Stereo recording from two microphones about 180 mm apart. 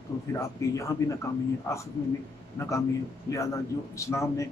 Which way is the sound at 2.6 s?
15° left (ahead or behind).